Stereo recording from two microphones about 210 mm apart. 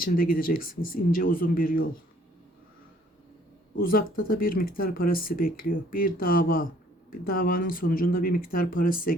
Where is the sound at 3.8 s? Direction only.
45° left (ahead or behind).